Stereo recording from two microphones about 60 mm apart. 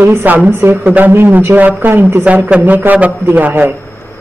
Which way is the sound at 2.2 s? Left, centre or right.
Right.